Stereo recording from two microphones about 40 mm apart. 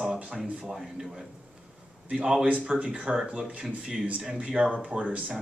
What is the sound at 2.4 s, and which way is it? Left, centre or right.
Speech, right.